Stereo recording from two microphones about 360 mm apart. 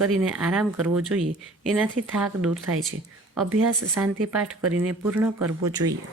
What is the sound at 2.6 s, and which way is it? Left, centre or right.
Speech, right.